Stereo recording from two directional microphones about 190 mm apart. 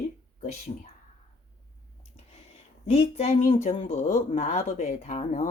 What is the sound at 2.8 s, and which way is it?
Speech, 35° left (ahead or behind).